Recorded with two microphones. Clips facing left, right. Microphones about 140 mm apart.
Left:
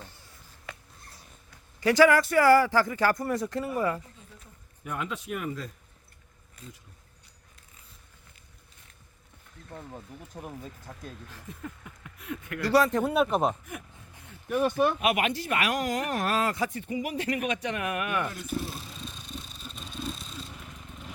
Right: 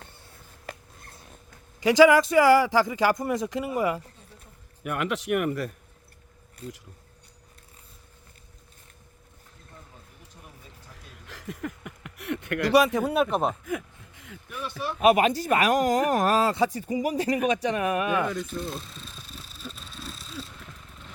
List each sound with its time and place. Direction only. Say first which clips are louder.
0.6 s writing: right 4 dB; 45° right (ahead or behind)
1.8 s speech: right 3 dB; 15° right (ahead or behind)
4.4 s speech: right 1 dB; 70° right (ahead or behind)
9.7 s speech: left 10 dB; 65° left (ahead or behind)
11.3 s speech: right 6 dB; 90° right; by 12.6 s 75° right (ahead or behind)
12.7 s speech: right 1 dB; 10° right (ahead or behind)
13.7 s a sound: right 7 dB; 90° right
14.5 s speech: left 9 dB; 50° left (ahead or behind)
15.0 s speech: right 7 dB; 35° right (ahead or behind)
18.4 s vehicle: even; centre (ahead or behind)